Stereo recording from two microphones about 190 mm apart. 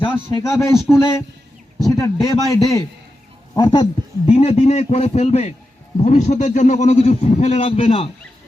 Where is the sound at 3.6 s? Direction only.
25° left (ahead or behind).